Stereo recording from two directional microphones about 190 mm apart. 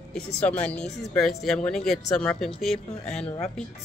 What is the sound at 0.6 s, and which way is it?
Speech, 5° left (ahead or behind).